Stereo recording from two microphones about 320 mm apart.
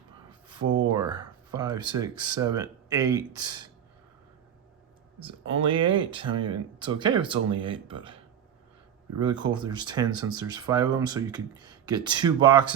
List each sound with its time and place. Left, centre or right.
0.9 s speech: centre
5.2 s speech: centre